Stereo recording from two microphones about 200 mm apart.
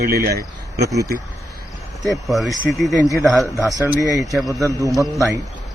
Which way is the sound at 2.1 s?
Centre (ahead or behind).